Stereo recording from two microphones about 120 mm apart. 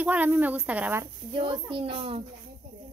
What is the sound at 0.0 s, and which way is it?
Speech, 15° right (ahead or behind).